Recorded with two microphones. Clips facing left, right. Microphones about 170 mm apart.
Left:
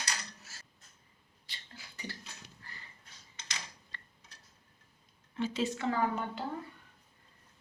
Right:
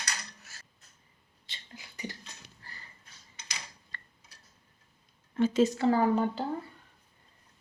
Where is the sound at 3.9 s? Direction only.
50° right (ahead or behind).